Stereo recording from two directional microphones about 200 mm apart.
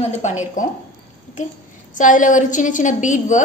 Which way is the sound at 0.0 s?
35° left (ahead or behind).